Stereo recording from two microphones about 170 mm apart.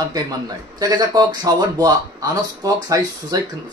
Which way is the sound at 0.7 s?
25° right (ahead or behind).